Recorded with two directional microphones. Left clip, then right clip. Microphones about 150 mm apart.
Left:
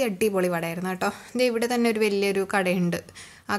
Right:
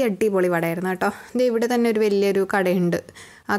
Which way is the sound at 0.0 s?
30° right (ahead or behind).